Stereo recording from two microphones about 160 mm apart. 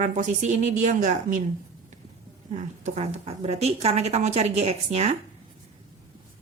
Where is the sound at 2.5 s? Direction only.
45° right (ahead or behind).